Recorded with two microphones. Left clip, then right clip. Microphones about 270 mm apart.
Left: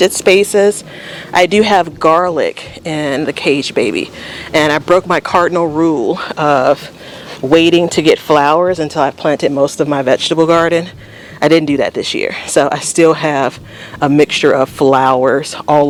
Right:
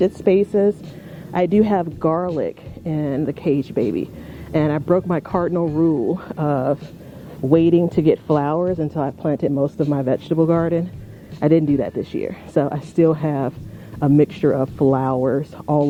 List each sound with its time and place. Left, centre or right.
0.0 s speech: centre
6.1 s speech: centre
15.6 s speech: left